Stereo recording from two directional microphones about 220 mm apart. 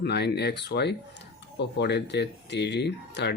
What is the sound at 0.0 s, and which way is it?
Speech, 50° left (ahead or behind).